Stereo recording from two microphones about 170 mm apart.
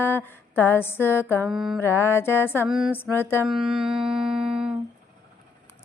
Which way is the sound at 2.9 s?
15° left (ahead or behind).